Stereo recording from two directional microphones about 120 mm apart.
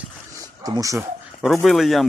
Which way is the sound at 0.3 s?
30° right (ahead or behind).